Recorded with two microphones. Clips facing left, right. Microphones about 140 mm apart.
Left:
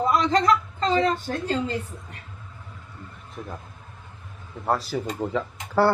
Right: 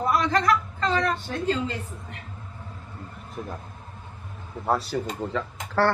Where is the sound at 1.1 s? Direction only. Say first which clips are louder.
Even; 45° left (ahead or behind).